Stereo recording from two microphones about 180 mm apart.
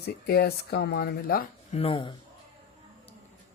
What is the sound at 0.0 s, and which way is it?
Speech, 60° left (ahead or behind).